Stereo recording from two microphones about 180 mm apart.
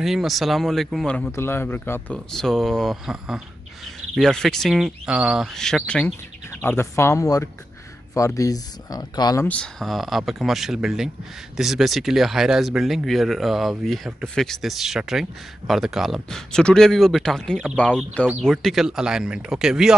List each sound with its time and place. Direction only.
0.0 s speech: centre (ahead or behind)
6.6 s speech: 15° left (ahead or behind)
9.5 s speech: 5° left (ahead or behind)